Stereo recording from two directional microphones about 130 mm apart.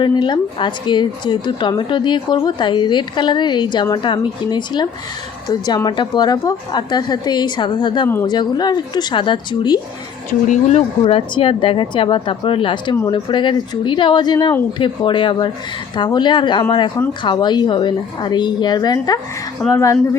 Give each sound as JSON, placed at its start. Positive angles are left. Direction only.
{"t": 0.0, "sound": "a woman's voice", "side_deg": 35}
{"t": 8.0, "sound": "speech", "side_deg": 20}
{"t": 8.3, "sound": "a woman's voice", "side_deg": 35}
{"t": 10.5, "sound": "speech", "side_deg": 60}
{"t": 11.0, "sound": "a woman's voice", "side_deg": 40}